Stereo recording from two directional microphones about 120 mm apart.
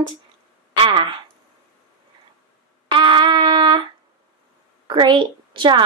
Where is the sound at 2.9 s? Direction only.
40° right (ahead or behind).